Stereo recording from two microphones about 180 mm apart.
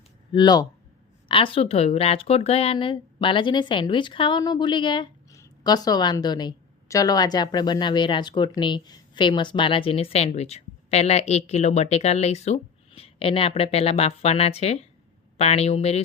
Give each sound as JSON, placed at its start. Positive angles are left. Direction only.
{"t": 0.3, "sound": "a woman's voice", "side_deg": 25}